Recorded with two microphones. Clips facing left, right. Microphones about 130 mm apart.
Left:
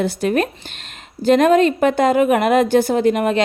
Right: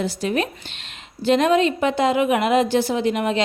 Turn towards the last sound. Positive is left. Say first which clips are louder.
# left 5 dB
turn(degrees=50)  # may be behind; listen again after turning